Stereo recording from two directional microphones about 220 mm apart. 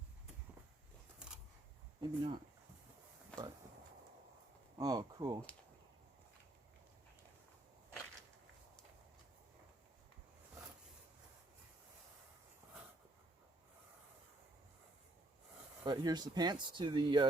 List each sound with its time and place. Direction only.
2.0 s speech: 20° right (ahead or behind)
3.3 s a sound: 5° left (ahead or behind)
4.8 s speech: 15° right (ahead or behind)
15.8 s speech: 20° right (ahead or behind)